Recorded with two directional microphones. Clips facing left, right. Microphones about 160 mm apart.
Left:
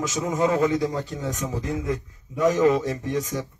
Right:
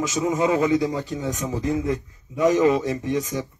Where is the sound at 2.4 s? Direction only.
15° right (ahead or behind).